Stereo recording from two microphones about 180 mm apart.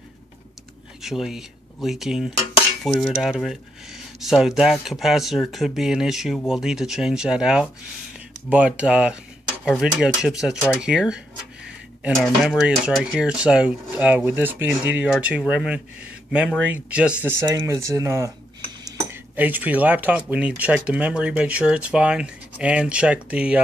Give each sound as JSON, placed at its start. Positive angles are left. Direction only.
{"t": 1.0, "sound": "speech", "side_deg": 0}